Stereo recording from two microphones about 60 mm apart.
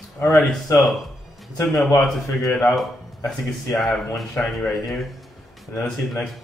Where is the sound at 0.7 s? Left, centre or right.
Centre.